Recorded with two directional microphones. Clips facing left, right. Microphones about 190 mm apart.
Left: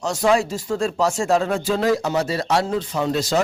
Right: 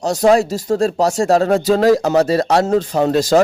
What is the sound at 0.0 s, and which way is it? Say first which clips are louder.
Speech: right 6 dB; 35° right (ahead or behind).